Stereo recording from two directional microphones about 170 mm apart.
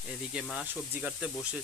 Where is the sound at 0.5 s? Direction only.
10° right (ahead or behind).